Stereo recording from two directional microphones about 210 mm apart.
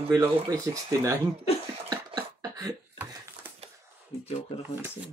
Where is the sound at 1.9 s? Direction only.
15° right (ahead or behind).